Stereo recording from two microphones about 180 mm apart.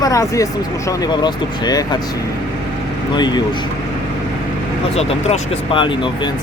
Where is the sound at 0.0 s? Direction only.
20° left (ahead or behind).